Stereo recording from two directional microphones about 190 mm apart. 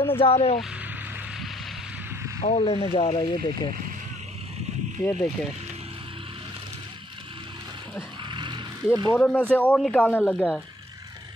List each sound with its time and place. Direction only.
0.0 s speech: 30° left (ahead or behind)
2.4 s speech: 30° left (ahead or behind)
5.0 s speech: 5° left (ahead or behind)
8.3 s a sound: 25° right (ahead or behind)
9.1 s speech: 10° left (ahead or behind)